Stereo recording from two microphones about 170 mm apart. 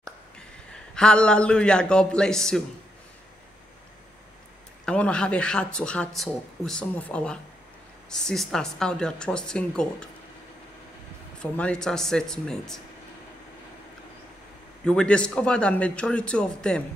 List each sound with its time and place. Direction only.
0.9 s speech: 5° left (ahead or behind)
4.8 s speech: 5° left (ahead or behind)
11.5 s speech: 5° left (ahead or behind)
14.9 s speech: 5° left (ahead or behind)